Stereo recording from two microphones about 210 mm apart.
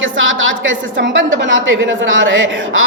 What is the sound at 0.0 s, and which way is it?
A woman's voice, 65° right (ahead or behind).